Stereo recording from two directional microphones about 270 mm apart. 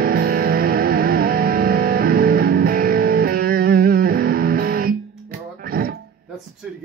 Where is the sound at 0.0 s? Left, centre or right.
Right.